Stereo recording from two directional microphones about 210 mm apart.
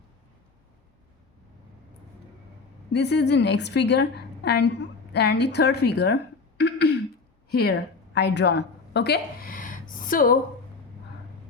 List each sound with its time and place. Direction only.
2.9 s a woman's voice: 55° left (ahead or behind)
6.6 s throat clearing: 50° left (ahead or behind)
7.5 s a woman's voice: 50° left (ahead or behind)